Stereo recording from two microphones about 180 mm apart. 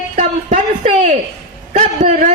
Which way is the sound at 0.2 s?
45° right (ahead or behind).